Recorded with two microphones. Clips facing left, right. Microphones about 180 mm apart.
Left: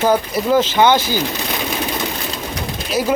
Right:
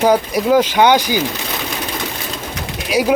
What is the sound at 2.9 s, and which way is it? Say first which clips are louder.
Speech: right 3 dB; 15° right (ahead or behind).